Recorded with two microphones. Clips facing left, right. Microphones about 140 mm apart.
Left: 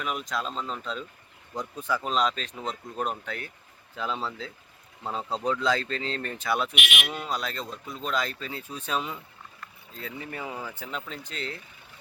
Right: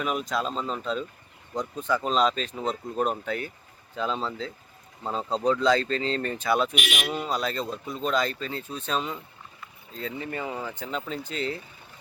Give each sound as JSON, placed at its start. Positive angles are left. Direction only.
{"t": 0.0, "sound": "speech", "side_deg": 0}
{"t": 2.6, "sound": "speech", "side_deg": -40}
{"t": 3.0, "sound": "speech", "side_deg": 0}
{"t": 6.7, "sound": "speech", "side_deg": -40}
{"t": 7.1, "sound": "speech", "side_deg": 0}